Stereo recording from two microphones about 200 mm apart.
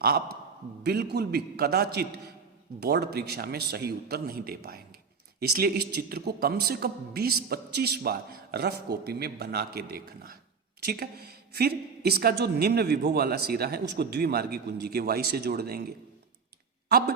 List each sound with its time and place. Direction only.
1.1 s a woman's voice: 50° right (ahead or behind)